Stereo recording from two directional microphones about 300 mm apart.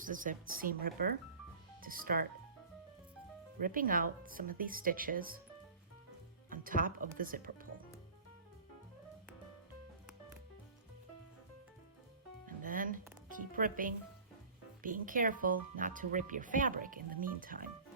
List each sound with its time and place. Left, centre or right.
0.0 s speech: right
3.6 s speech: right
6.5 s speech: right
12.5 s music: right
13.2 s speech: right